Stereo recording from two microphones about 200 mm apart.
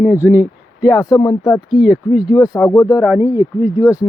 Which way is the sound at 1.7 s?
5° right (ahead or behind).